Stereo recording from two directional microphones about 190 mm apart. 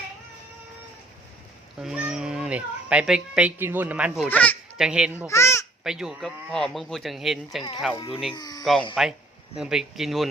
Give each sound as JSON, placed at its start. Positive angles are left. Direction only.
{"t": 1.8, "sound": "speech", "side_deg": -5}
{"t": 4.3, "sound": "a child's voice", "side_deg": 5}
{"t": 4.8, "sound": "speech", "side_deg": -5}
{"t": 5.3, "sound": "a child's voice", "side_deg": 15}
{"t": 5.8, "sound": "speech", "side_deg": -5}
{"t": 7.9, "sound": "speech", "side_deg": 30}
{"t": 9.0, "sound": "speech", "side_deg": 0}